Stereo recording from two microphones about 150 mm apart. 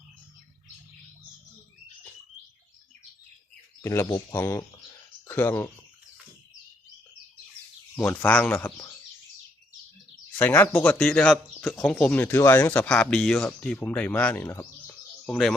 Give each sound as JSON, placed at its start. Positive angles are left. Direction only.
{"t": 3.8, "sound": "speech", "side_deg": 20}
{"t": 7.9, "sound": "speech", "side_deg": 10}
{"t": 10.3, "sound": "speech", "side_deg": 15}
{"t": 15.3, "sound": "speech", "side_deg": 5}